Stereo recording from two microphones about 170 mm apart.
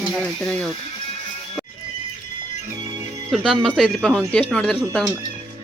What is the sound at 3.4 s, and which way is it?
Speech, 5° left (ahead or behind).